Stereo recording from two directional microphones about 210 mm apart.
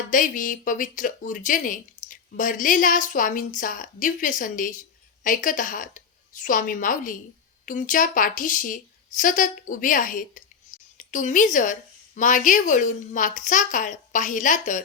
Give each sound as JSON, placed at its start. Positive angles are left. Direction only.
{"t": 0.1, "sound": "speech", "side_deg": 40}